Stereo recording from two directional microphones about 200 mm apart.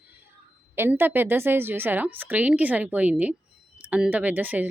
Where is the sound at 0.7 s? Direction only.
10° right (ahead or behind).